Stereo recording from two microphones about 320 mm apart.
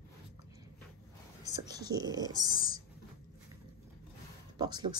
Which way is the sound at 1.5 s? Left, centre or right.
Centre.